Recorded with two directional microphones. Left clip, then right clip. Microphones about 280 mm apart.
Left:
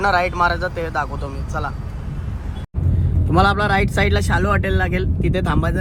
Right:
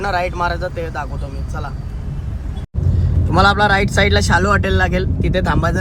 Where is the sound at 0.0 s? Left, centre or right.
Centre.